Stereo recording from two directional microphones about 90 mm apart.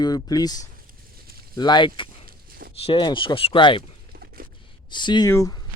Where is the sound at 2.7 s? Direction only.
90° left.